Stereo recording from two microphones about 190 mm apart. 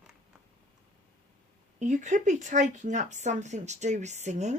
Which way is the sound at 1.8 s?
40° right (ahead or behind).